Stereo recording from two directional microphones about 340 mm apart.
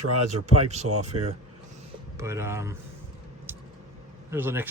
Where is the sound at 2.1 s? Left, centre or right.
Centre.